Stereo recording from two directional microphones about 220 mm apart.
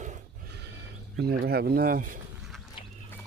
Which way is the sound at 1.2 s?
45° right (ahead or behind).